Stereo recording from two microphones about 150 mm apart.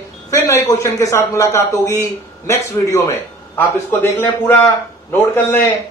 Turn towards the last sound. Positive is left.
turn(degrees=15)  # may be behind; listen again after turning